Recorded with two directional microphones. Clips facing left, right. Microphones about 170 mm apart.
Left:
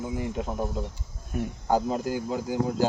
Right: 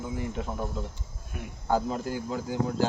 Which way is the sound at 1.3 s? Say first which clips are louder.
Left 10 dB; 45° left (ahead or behind).